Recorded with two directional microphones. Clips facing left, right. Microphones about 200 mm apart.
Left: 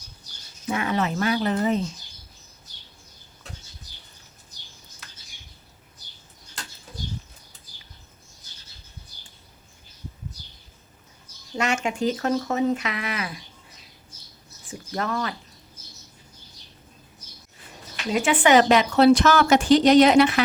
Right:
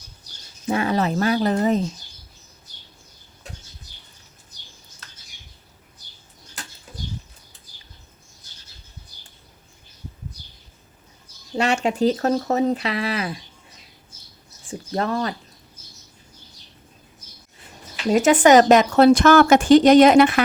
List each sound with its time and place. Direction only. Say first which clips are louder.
0.7 s speech: right 4 dB; 35° right (ahead or behind)
11.5 s speech: right 4 dB; 35° right (ahead or behind)
14.7 s speech: right 4 dB; 30° right (ahead or behind)
18.1 s a woman's voice: right 5 dB; 40° right (ahead or behind)